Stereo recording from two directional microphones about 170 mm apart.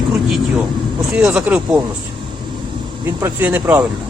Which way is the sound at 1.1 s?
10° right (ahead or behind).